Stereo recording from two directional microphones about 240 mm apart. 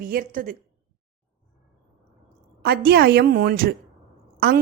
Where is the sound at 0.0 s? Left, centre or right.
Right.